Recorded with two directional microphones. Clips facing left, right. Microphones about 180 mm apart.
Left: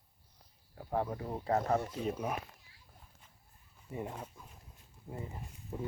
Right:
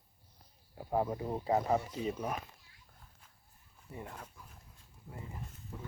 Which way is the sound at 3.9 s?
25° left (ahead or behind).